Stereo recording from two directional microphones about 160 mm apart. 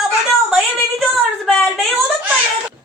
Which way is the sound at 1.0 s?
5° left (ahead or behind).